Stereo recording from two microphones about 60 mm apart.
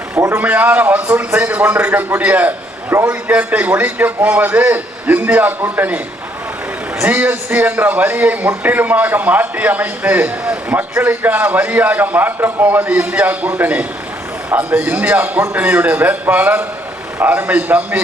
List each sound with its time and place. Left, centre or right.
0.3 s a man's voice: right
7.0 s a man's voice: right